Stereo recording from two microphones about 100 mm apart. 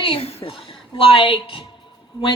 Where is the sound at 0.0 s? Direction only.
80° left.